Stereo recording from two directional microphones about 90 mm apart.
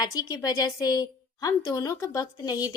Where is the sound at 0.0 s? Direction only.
45° left (ahead or behind).